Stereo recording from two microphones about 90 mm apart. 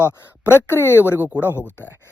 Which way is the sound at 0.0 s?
25° left (ahead or behind).